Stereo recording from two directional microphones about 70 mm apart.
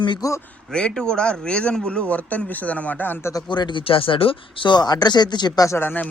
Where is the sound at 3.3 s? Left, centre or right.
Left.